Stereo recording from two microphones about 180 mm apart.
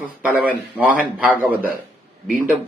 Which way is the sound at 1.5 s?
55° right (ahead or behind).